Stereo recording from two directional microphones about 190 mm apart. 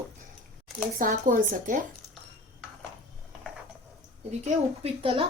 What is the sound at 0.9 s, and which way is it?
Speech, 45° right (ahead or behind).